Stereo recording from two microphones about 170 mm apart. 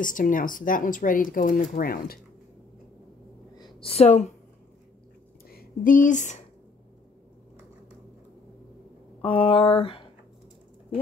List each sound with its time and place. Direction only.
0.0 s speech: 50° left (ahead or behind)
3.5 s a sound: 30° left (ahead or behind)
5.5 s speech: 60° left (ahead or behind)
9.2 s speech: 30° left (ahead or behind)